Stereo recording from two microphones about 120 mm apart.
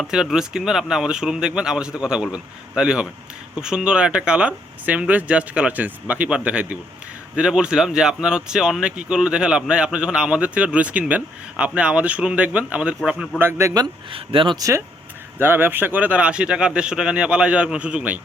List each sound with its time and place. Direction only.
0.0 s speech: 5° right (ahead or behind)
13.4 s a man's voice: 20° right (ahead or behind)
14.1 s speech: 45° right (ahead or behind)
14.6 s a man's voice: 25° right (ahead or behind)